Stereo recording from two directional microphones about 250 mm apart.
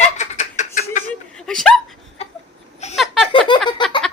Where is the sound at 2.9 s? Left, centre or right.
Centre.